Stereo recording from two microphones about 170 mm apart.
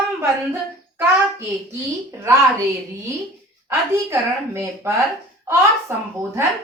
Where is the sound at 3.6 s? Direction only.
15° right (ahead or behind).